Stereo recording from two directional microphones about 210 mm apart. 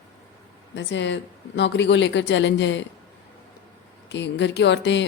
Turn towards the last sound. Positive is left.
turn(degrees=55)  # may be behind; listen again after turning